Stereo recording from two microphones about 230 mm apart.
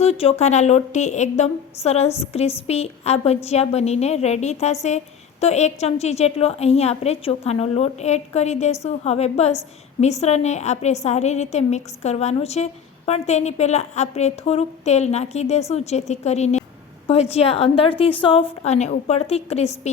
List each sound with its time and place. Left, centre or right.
0.0 s a woman's voice: left